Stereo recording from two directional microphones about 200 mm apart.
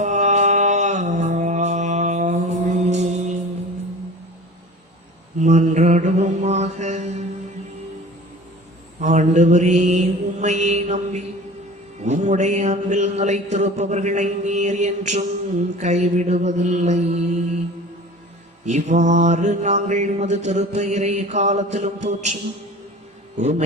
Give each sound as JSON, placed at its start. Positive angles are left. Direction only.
{"t": 0.0, "sound": "mantra", "side_deg": -35}
{"t": 5.4, "sound": "mantra", "side_deg": -35}
{"t": 9.0, "sound": "mantra", "side_deg": -35}
{"t": 18.6, "sound": "mantra", "side_deg": -35}
{"t": 23.4, "sound": "mantra", "side_deg": -35}